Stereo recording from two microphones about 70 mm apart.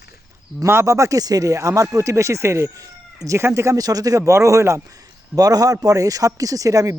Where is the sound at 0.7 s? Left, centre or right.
Right.